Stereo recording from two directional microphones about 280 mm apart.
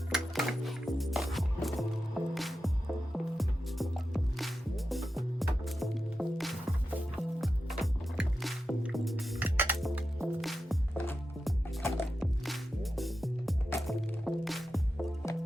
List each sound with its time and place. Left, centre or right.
0.1 s music: centre